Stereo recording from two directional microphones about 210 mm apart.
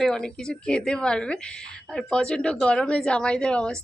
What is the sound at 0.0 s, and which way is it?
A woman's voice, 5° left (ahead or behind).